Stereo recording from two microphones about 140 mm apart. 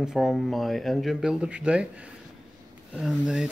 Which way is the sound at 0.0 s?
Centre (ahead or behind).